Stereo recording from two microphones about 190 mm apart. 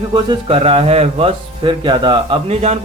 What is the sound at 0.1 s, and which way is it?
Speech, 25° right (ahead or behind).